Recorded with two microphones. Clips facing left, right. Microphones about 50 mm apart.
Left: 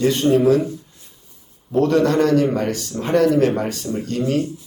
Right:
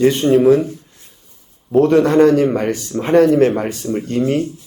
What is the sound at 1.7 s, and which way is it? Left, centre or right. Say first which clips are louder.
A man's voice: right 5 dB; right.